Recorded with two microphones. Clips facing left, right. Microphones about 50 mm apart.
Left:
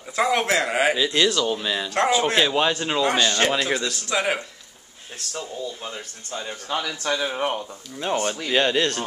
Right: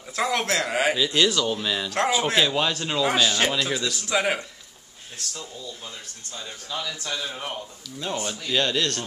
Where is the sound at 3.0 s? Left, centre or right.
Centre.